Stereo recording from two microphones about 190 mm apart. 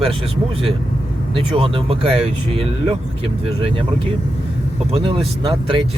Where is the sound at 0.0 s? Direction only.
30° right (ahead or behind).